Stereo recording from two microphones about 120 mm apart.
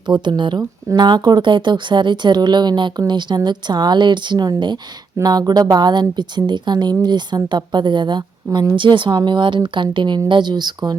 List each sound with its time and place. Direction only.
0.1 s speech: 40° right (ahead or behind)